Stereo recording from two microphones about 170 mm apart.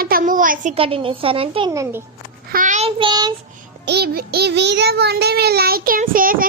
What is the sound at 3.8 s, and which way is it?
Child singing, 75° right (ahead or behind).